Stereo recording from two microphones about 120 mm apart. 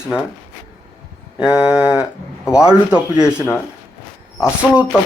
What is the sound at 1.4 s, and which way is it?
Speech, 10° right (ahead or behind).